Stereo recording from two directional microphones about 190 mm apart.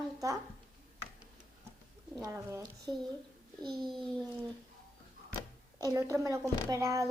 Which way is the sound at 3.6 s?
25° right (ahead or behind).